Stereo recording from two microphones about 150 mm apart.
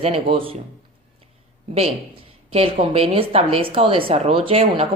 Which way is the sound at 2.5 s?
40° right (ahead or behind).